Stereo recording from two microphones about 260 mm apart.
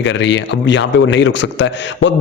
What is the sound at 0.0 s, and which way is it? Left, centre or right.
A man's voice, left.